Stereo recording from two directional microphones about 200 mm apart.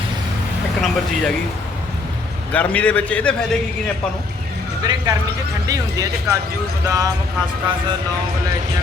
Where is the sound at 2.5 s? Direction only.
5° left (ahead or behind).